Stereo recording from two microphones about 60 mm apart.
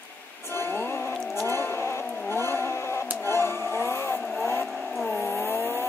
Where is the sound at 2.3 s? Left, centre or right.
Left.